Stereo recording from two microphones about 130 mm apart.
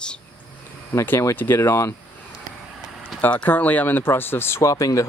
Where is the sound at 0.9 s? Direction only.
20° left (ahead or behind).